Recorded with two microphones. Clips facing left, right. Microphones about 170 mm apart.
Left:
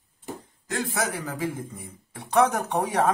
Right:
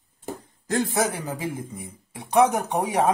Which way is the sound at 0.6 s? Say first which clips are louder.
Right 5 dB; 35° right (ahead or behind).